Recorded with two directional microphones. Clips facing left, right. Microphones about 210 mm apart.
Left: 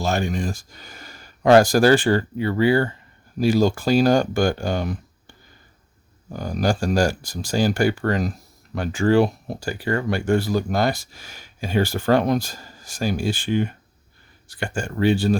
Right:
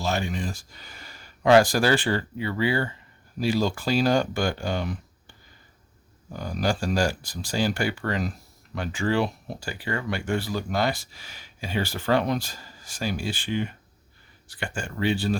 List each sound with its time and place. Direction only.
0.0 s speech: 45° left (ahead or behind)
6.3 s speech: 45° left (ahead or behind)